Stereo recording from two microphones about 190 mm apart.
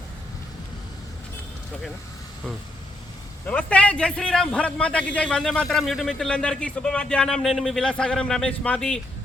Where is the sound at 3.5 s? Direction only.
5° left (ahead or behind).